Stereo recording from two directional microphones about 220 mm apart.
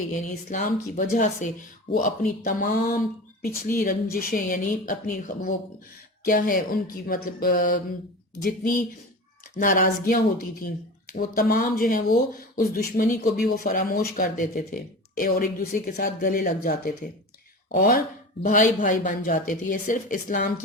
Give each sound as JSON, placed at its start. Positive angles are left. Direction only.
{"t": 0.3, "sound": "speech", "side_deg": 35}